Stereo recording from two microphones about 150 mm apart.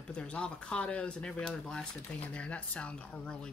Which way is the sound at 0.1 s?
5° left (ahead or behind).